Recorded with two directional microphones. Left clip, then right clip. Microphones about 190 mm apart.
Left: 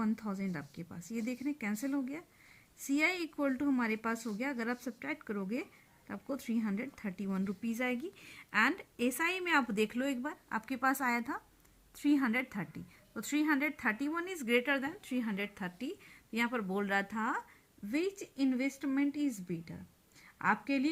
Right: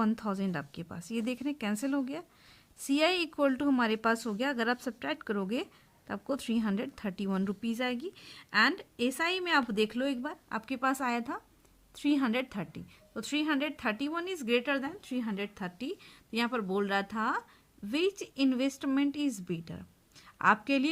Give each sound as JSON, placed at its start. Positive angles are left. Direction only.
{"t": 0.0, "sound": "speech", "side_deg": -40}
{"t": 1.1, "sound": "speech", "side_deg": -50}
{"t": 1.7, "sound": "a woman's voice", "side_deg": -35}